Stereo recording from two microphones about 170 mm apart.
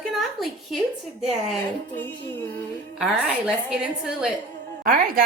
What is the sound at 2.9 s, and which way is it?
A woman's voice, 5° right (ahead or behind).